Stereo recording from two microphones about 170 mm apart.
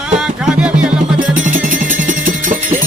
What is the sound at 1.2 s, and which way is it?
Music, 50° right (ahead or behind).